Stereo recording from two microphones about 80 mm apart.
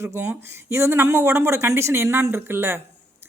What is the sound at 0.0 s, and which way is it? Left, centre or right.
Speech, right.